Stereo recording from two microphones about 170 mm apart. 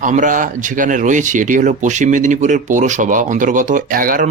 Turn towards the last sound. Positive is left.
turn(degrees=-55)  # may be behind; listen again after turning